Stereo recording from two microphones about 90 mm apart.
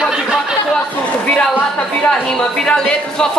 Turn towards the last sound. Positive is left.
turn(degrees=10)  # may be behind; listen again after turning